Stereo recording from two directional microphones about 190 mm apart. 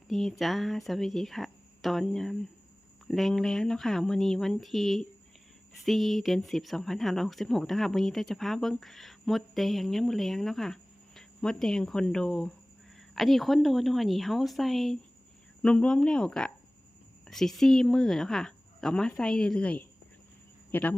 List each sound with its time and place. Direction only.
0.1 s speech: centre (ahead or behind)